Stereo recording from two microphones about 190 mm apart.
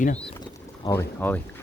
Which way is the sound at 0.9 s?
10° left (ahead or behind).